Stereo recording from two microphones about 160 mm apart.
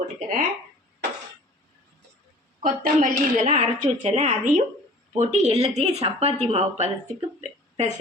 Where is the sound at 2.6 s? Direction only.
60° right (ahead or behind).